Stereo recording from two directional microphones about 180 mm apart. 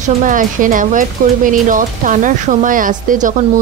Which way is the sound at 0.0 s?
45° right (ahead or behind).